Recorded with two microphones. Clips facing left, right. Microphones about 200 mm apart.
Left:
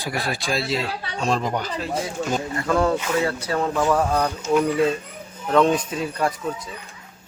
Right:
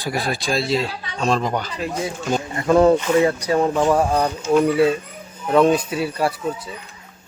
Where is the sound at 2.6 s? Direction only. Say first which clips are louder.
Right 8 dB; 20° right (ahead or behind).